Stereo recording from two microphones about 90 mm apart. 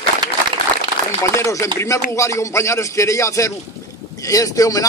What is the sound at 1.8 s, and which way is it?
Speech, 35° left (ahead or behind).